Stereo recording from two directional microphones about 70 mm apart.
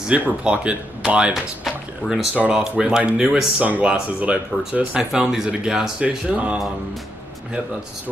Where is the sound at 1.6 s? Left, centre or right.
Centre.